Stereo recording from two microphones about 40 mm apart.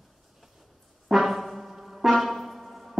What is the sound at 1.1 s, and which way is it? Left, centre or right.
Music, centre.